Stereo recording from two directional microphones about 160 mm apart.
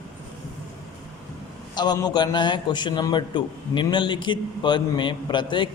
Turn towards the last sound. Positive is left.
turn(degrees=30)  # may be behind; listen again after turning